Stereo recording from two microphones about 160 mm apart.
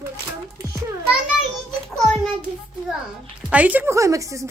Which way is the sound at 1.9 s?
Centre (ahead or behind).